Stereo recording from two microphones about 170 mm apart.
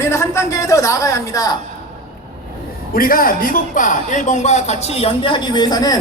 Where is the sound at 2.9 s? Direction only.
55° left (ahead or behind).